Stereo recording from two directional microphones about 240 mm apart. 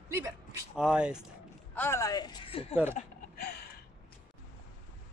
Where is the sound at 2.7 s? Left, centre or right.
Centre.